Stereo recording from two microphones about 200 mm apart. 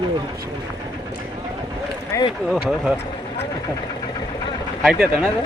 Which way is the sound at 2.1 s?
15° left (ahead or behind).